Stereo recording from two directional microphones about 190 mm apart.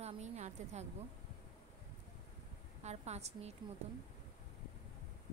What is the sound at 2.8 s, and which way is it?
Speech, 35° right (ahead or behind).